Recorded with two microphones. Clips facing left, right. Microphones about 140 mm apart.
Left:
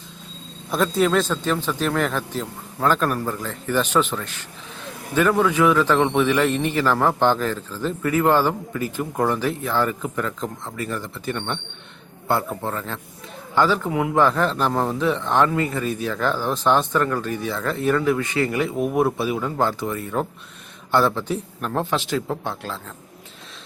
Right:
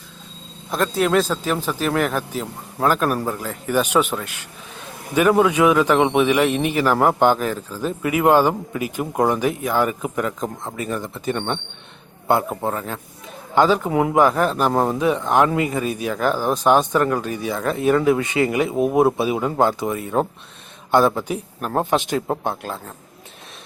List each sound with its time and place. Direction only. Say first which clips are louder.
0.7 s a man's voice: even; centre (ahead or behind)
21.6 s speech: right 4 dB; 40° right (ahead or behind)
21.8 s speech: right 4 dB; 20° right (ahead or behind)
22.1 s speech: right 3 dB; 50° right (ahead or behind)